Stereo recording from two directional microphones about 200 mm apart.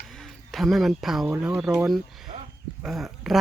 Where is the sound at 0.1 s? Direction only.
Centre (ahead or behind).